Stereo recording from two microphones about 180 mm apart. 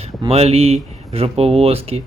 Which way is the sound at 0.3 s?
35° right (ahead or behind).